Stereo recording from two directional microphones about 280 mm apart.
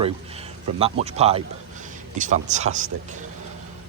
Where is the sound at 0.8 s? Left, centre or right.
Right.